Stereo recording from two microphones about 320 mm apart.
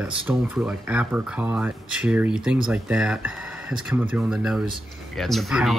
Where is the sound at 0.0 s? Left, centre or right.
Centre.